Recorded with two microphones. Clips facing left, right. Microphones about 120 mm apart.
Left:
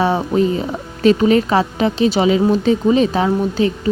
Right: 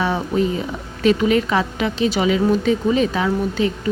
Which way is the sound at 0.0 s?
35° left (ahead or behind).